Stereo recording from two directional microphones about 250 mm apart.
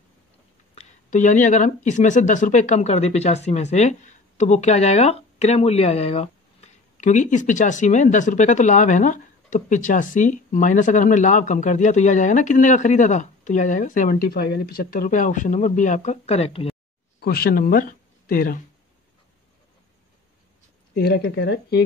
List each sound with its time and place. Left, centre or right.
0.7 s speech: left
17.2 s speech: left
20.9 s speech: left